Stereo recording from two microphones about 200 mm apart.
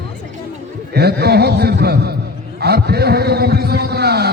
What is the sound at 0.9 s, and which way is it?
A man's voice, 55° right (ahead or behind).